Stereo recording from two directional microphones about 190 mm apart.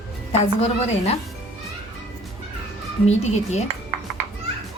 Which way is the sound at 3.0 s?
35° left (ahead or behind).